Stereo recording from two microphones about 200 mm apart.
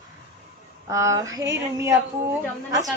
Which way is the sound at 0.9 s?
15° right (ahead or behind).